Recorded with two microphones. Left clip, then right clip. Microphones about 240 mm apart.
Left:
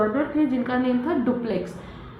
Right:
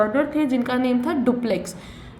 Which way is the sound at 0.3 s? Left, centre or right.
Right.